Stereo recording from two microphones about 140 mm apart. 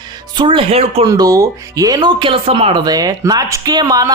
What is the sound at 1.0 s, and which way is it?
Speech, 25° right (ahead or behind).